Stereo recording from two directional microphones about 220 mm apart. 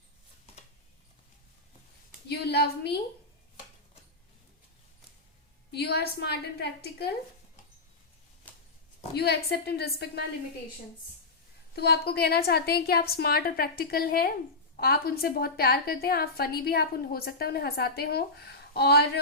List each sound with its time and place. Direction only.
2.2 s a woman's voice: 50° left (ahead or behind)
5.7 s a woman's voice: 45° left (ahead or behind)
9.1 s a woman's voice: 45° left (ahead or behind)
11.7 s a woman's voice: 45° left (ahead or behind)